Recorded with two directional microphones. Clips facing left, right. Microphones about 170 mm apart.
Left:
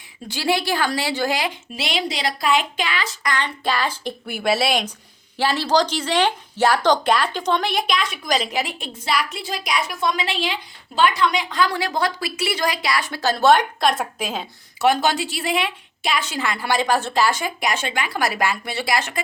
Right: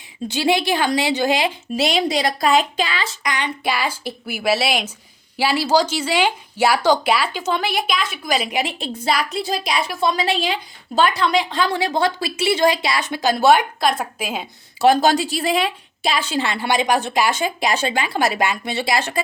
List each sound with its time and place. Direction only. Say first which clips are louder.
0.3 s a woman's voice: right 3 dB; 20° right (ahead or behind)
1.6 s speech: right 6 dB; 40° right (ahead or behind)
3.2 s speech: even; 15° right (ahead or behind)
8.8 s a woman's voice: right 3 dB; 35° right (ahead or behind); by 14.4 s 5° right (ahead or behind)
14.8 s a woman's voice: right 4 dB; 35° right (ahead or behind)